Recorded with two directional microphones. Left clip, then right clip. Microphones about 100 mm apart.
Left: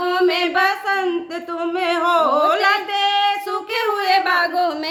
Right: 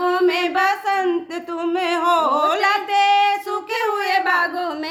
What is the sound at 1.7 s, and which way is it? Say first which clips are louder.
Female singing: left 1 dB; 45° right (ahead or behind).